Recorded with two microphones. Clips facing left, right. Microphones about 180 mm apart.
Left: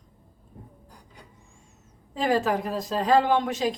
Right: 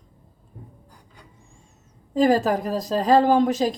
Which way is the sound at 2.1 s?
40° right (ahead or behind).